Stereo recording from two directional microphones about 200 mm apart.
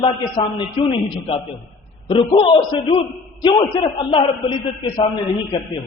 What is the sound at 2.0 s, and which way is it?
A man's voice, 25° left (ahead or behind).